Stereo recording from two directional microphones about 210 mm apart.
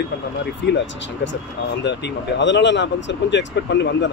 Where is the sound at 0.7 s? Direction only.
55° left (ahead or behind).